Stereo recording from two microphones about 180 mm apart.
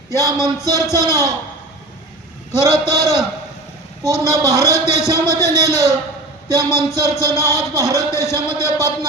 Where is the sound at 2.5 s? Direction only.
15° left (ahead or behind).